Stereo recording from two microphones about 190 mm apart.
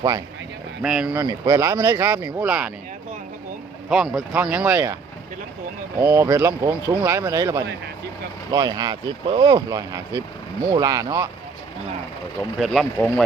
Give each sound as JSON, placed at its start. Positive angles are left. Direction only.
{"t": 0.8, "sound": "speech", "side_deg": -5}
{"t": 1.2, "sound": "speech", "side_deg": -15}
{"t": 3.8, "sound": "speech", "side_deg": -5}
{"t": 6.0, "sound": "speech", "side_deg": -15}
{"t": 12.5, "sound": "speech", "side_deg": 0}